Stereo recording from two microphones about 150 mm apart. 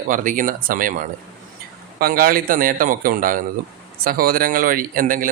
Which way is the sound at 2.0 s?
80° right.